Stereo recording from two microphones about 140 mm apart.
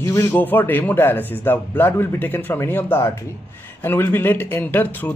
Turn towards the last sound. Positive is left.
turn(degrees=15)  # may be behind; listen again after turning